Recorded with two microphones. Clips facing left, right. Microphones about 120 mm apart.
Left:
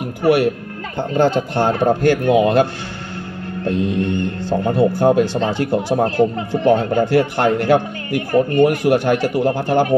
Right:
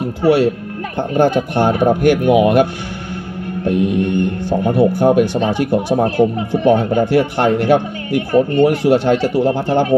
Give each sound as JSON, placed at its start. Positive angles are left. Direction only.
{"t": 0.0, "sound": "speech", "side_deg": -25}